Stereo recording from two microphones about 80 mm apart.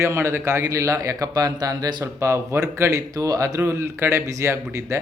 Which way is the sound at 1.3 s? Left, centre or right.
Right.